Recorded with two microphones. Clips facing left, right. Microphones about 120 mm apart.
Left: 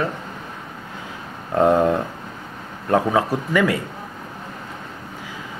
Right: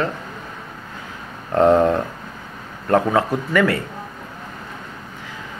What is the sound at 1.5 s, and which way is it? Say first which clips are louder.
Speech: right 2 dB; 10° left (ahead or behind).